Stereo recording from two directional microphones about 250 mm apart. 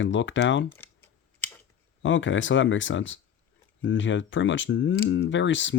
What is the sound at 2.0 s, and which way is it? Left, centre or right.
Speech, left.